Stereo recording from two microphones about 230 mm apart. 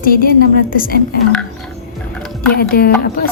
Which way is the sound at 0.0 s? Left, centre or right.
Left.